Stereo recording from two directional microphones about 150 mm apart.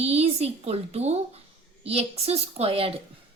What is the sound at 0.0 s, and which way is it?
A woman's voice, 45° right (ahead or behind).